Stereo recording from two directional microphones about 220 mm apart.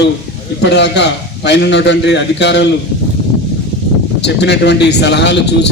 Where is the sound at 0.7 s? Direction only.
50° left (ahead or behind).